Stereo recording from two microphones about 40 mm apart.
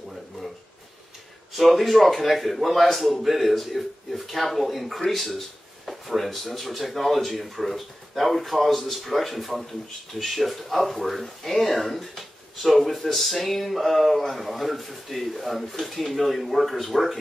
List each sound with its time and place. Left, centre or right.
1.6 s speech: centre